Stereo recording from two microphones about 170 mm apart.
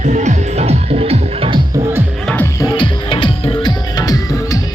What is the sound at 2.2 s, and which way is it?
Music, 10° left (ahead or behind).